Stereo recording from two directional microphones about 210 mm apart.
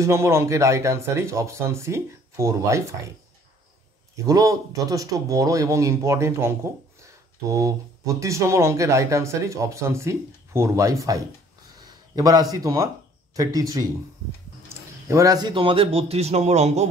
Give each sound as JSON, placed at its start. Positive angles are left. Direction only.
{"t": 0.0, "sound": "speech", "side_deg": -15}
{"t": 4.3, "sound": "speech", "side_deg": -15}
{"t": 15.0, "sound": "a man's voice", "side_deg": -15}